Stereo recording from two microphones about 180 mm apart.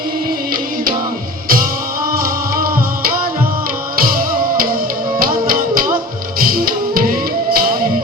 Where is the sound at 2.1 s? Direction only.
55° right (ahead or behind).